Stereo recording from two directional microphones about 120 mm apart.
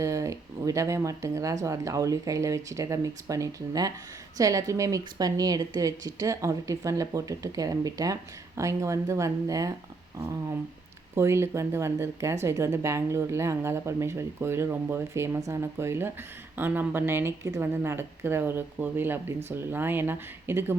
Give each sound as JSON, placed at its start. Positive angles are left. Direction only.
{"t": 0.0, "sound": "a woman's voice", "side_deg": -25}